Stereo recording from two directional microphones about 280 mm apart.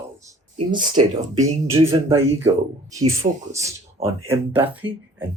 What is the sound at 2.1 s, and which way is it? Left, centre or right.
Speech, centre.